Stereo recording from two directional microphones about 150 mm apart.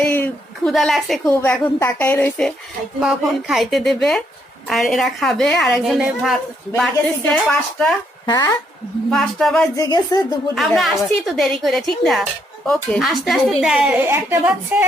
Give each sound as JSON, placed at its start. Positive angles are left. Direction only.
{"t": 0.1, "sound": "speech", "side_deg": 5}
{"t": 1.2, "sound": "a woman's voice", "side_deg": 15}
{"t": 3.0, "sound": "a woman's voice", "side_deg": -5}
{"t": 8.3, "sound": "a woman's voice", "side_deg": 25}
{"t": 9.0, "sound": "a woman's voice", "side_deg": 0}
{"t": 9.7, "sound": "a woman's voice", "side_deg": 25}
{"t": 10.5, "sound": "a woman's voice", "side_deg": 0}